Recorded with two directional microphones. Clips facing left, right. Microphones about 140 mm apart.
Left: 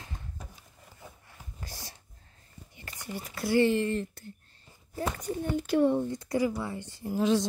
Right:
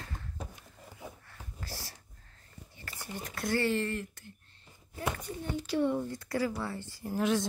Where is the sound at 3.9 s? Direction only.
35° left (ahead or behind); by 5.9 s 50° left (ahead or behind).